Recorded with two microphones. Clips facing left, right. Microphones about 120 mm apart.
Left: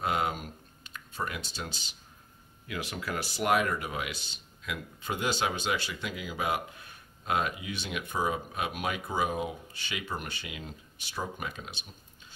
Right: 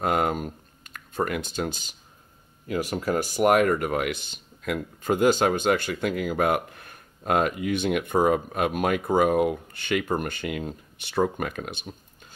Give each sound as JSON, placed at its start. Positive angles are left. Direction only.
{"t": 0.0, "sound": "speech", "side_deg": -50}